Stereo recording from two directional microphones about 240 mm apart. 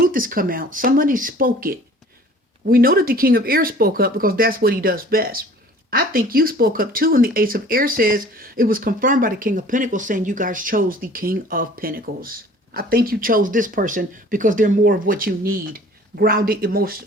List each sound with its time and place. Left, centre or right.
0.0 s speech: right